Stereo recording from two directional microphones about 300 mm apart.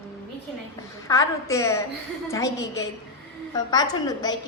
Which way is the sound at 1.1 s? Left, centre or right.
Centre.